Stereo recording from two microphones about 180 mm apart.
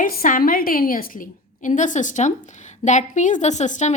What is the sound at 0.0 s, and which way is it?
A woman's voice, 50° left (ahead or behind).